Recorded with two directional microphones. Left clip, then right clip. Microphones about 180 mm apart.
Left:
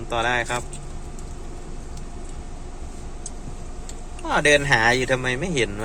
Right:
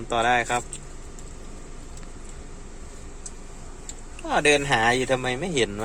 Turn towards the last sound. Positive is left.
turn(degrees=-15)  # may be behind; listen again after turning